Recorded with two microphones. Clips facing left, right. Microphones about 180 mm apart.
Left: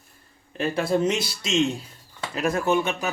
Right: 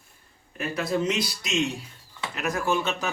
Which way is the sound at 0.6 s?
30° left (ahead or behind).